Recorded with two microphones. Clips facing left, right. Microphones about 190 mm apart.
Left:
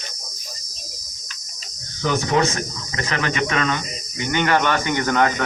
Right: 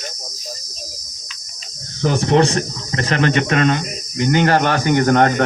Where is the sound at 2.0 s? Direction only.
30° right (ahead or behind).